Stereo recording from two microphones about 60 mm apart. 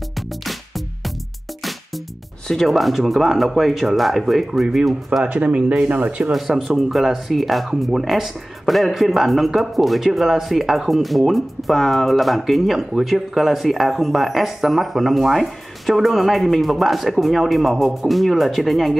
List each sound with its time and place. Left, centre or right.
2.4 s speech: centre
5.2 s speech: right
6.3 s speech: centre